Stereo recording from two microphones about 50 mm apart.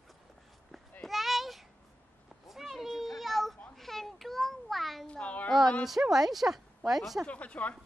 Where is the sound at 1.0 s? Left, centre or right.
Centre.